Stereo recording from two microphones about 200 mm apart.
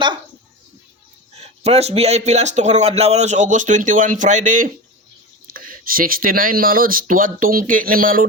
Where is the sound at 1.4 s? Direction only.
30° right (ahead or behind).